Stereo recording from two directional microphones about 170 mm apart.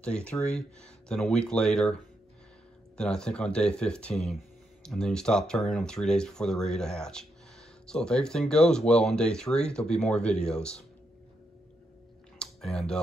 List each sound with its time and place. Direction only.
0.0 s speech: 5° left (ahead or behind)
3.0 s speech: 5° left (ahead or behind)
12.4 s a sound: 5° left (ahead or behind)